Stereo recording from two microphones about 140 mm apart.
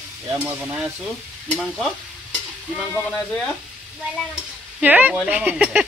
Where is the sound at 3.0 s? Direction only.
5° left (ahead or behind).